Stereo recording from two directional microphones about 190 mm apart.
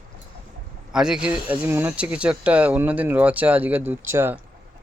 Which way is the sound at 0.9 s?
5° right (ahead or behind).